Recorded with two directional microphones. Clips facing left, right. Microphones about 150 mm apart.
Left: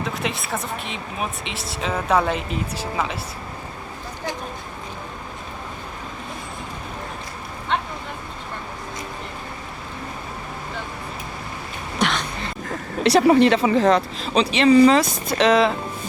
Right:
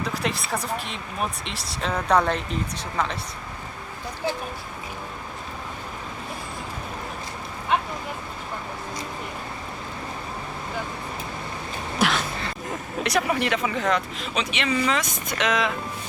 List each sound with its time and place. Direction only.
0.0 s speech: centre (ahead or behind)
7.7 s vehicle: 5° right (ahead or behind)
11.9 s a sound: 5° right (ahead or behind)
13.0 s speech: 30° left (ahead or behind)